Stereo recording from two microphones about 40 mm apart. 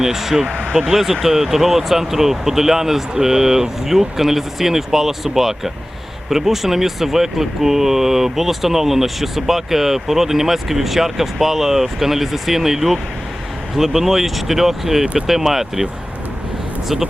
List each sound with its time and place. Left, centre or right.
0.0 s speech: centre
0.4 s speech: right
0.9 s speech: centre